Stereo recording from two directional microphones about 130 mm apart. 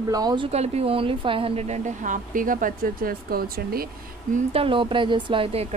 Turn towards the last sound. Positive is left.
turn(degrees=-50)  # may be behind; listen again after turning